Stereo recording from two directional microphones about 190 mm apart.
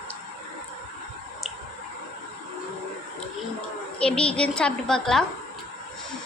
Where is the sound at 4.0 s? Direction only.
5° left (ahead or behind).